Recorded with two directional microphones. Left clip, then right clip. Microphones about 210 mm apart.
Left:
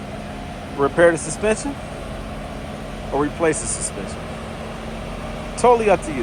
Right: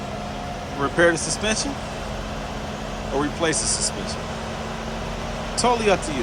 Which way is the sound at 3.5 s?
15° right (ahead or behind).